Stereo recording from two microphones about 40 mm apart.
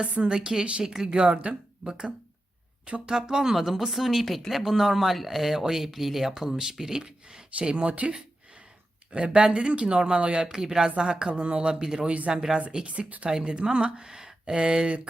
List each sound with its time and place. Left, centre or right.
0.0 s speech: right
3.1 s speech: centre
3.5 s speech: centre; by 8.1 s right
9.1 s speech: right
12.8 s speech: right